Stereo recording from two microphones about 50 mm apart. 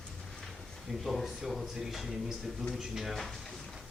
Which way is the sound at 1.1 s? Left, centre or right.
Centre.